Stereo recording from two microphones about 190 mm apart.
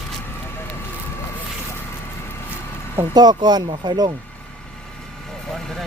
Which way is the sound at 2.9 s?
20° right (ahead or behind).